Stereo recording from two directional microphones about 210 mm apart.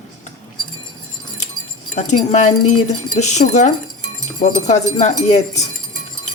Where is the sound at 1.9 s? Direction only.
35° left (ahead or behind).